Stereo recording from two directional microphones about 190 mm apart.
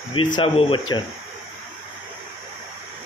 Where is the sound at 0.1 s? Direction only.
25° left (ahead or behind).